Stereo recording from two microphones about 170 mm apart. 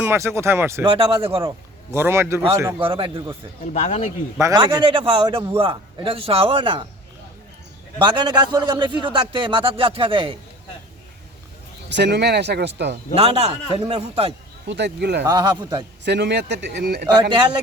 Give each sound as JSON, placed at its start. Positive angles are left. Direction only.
{"t": 0.0, "sound": "speech", "side_deg": -15}
{"t": 0.9, "sound": "a man's voice", "side_deg": -35}
{"t": 1.4, "sound": "a man's voice", "side_deg": -15}
{"t": 2.8, "sound": "a man's voice", "side_deg": -30}
{"t": 3.6, "sound": "speech", "side_deg": 45}
{"t": 4.4, "sound": "a man's voice", "side_deg": -20}
{"t": 4.8, "sound": "a man's voice", "side_deg": -30}
{"t": 7.9, "sound": "a man's voice", "side_deg": -25}
{"t": 11.9, "sound": "speech", "side_deg": -85}
{"t": 13.1, "sound": "a man's voice", "side_deg": -35}
{"t": 14.7, "sound": "speech", "side_deg": -90}
{"t": 15.3, "sound": "a man's voice", "side_deg": -25}
{"t": 16.0, "sound": "speech", "side_deg": -90}
{"t": 17.2, "sound": "a man's voice", "side_deg": -30}